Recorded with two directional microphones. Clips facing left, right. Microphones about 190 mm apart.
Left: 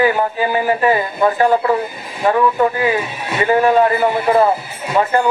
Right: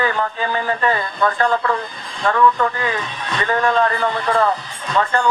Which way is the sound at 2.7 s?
10° left (ahead or behind).